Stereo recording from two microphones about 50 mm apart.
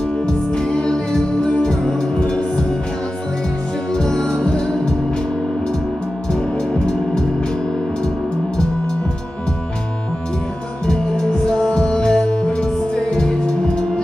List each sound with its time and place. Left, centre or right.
0.6 s music: centre
3.9 s music: centre
10.9 s music: centre